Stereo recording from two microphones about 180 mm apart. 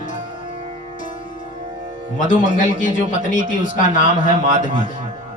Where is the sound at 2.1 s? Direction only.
45° left (ahead or behind).